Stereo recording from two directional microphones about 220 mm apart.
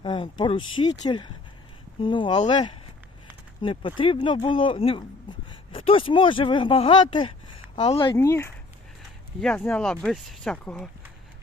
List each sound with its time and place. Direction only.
0.0 s speech: 20° left (ahead or behind); by 10.8 s 5° left (ahead or behind)